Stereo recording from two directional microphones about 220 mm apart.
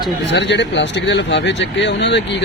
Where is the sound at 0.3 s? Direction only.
55° left (ahead or behind).